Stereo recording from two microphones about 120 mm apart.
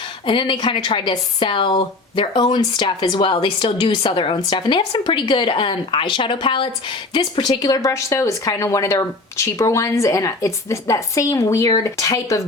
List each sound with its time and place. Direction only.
0.3 s a woman's voice: 45° left (ahead or behind); by 12.4 s 30° left (ahead or behind)